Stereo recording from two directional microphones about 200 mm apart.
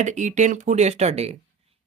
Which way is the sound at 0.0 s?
35° right (ahead or behind).